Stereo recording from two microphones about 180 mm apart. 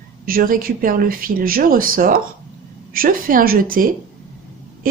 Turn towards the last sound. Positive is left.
turn(degrees=-50)  # may be behind; listen again after turning